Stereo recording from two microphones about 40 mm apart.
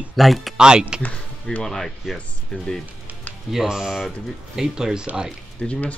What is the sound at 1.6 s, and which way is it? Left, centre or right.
Speech, centre.